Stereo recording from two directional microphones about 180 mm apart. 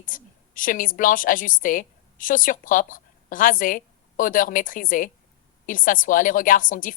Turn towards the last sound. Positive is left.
turn(degrees=50)  # may be behind; listen again after turning